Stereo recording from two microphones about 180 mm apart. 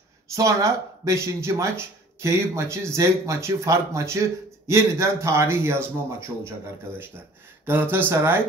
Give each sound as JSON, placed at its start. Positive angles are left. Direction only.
{"t": 0.3, "sound": "speech", "side_deg": -15}
{"t": 7.6, "sound": "speech", "side_deg": -10}